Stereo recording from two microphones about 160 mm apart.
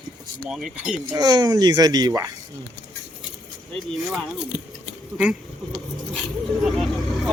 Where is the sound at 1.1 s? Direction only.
25° right (ahead or behind).